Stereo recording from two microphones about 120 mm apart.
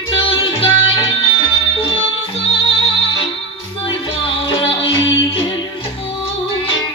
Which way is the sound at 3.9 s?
45° left (ahead or behind).